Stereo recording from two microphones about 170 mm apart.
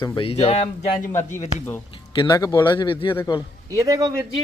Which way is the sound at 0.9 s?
55° left (ahead or behind).